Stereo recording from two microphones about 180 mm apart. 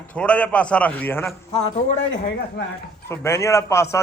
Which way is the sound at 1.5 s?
40° left (ahead or behind).